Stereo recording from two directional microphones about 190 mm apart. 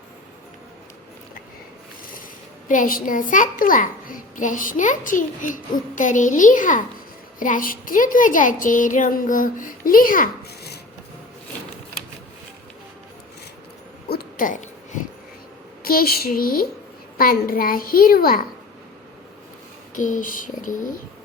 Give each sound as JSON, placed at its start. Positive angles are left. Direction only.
{"t": 2.6, "sound": "a child's voice", "side_deg": 45}
{"t": 14.1, "sound": "owl", "side_deg": 50}
{"t": 15.8, "sound": "a child's voice", "side_deg": 50}
{"t": 20.0, "sound": "a child's voice", "side_deg": 40}